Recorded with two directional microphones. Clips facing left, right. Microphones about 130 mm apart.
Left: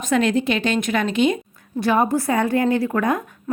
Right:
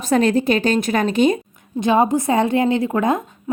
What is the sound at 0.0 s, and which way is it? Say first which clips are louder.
A woman's voice: right 3 dB; 35° right (ahead or behind).